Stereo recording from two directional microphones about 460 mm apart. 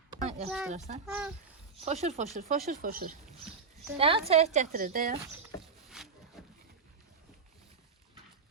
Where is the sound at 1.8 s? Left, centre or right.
Centre.